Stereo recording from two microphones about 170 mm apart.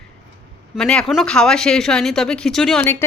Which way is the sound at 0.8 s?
5° left (ahead or behind).